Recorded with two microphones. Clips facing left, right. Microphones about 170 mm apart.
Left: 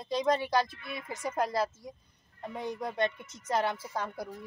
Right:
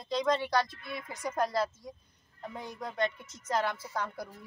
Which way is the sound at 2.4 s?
15° left (ahead or behind).